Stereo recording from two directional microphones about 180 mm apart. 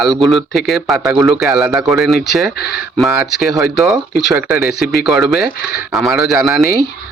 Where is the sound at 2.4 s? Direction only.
65° left (ahead or behind).